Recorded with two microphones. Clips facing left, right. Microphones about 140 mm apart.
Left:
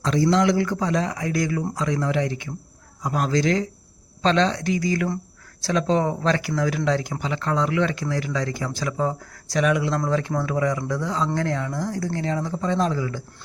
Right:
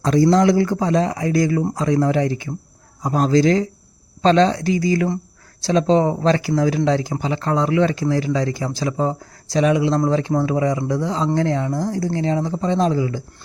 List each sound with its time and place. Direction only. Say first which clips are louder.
0.0 s speech: right 5 dB; 40° right (ahead or behind); by 13.2 s 20° right (ahead or behind)